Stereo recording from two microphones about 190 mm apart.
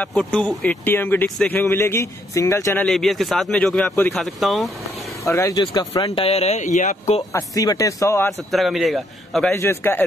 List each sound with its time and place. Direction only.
0.0 s a man's voice: 5° left (ahead or behind)
5.3 s speech: 20° left (ahead or behind); by 7.2 s 40° left (ahead or behind)
7.3 s speech: 20° left (ahead or behind)
8.5 s a man's voice: centre (ahead or behind)